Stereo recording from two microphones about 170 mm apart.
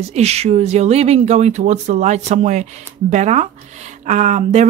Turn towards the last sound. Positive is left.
turn(degrees=-45)  # may be behind; listen again after turning